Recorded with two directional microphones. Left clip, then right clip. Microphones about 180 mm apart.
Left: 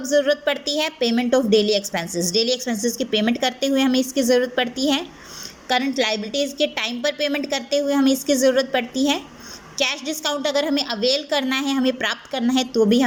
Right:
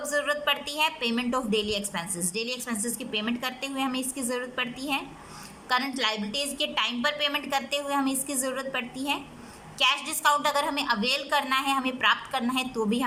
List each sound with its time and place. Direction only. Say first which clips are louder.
0.1 s a woman's voice: left 8 dB; 25° left (ahead or behind)